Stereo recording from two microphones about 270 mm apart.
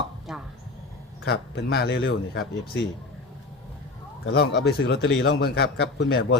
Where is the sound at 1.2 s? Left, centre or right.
Left.